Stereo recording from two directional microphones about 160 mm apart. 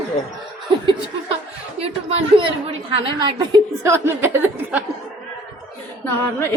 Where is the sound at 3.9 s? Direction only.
15° right (ahead or behind).